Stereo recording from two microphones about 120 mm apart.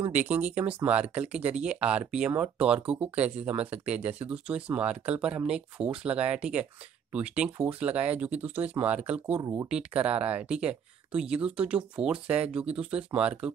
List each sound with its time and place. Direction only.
0.1 s speech: 15° right (ahead or behind)
9.4 s speech: 25° right (ahead or behind)
9.7 s speech: 10° right (ahead or behind)